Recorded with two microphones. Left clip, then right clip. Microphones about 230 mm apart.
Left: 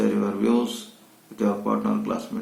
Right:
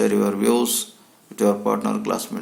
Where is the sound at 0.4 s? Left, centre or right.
Right.